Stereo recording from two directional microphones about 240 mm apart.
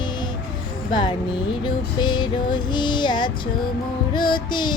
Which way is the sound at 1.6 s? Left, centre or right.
Centre.